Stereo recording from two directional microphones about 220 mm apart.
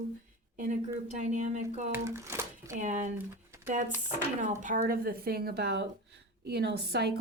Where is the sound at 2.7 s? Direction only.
35° right (ahead or behind).